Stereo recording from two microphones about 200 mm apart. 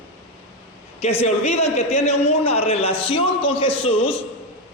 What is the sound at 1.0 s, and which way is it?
A man's voice, 30° left (ahead or behind).